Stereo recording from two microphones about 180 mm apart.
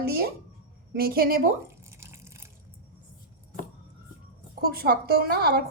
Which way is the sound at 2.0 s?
15° right (ahead or behind).